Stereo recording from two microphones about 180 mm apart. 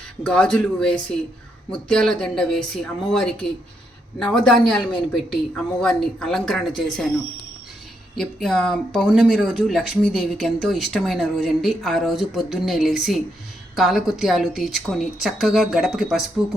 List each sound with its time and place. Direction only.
0.2 s speech: 5° left (ahead or behind)
8.1 s speech: centre (ahead or behind)